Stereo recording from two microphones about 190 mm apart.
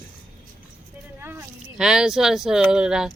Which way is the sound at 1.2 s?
10° right (ahead or behind).